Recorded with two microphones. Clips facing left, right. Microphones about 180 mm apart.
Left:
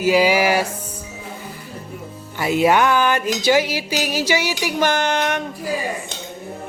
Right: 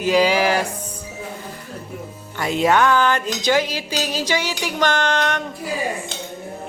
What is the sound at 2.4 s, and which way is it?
Speech, 10° left (ahead or behind).